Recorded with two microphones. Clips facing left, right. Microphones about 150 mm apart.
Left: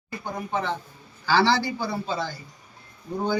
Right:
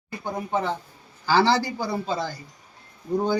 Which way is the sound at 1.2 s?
40° right (ahead or behind).